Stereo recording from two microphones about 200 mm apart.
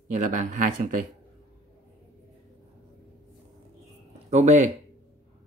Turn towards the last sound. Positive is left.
turn(degrees=-35)  # may be behind; listen again after turning